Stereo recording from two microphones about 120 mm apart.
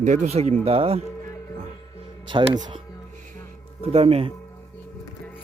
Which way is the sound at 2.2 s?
40° right (ahead or behind).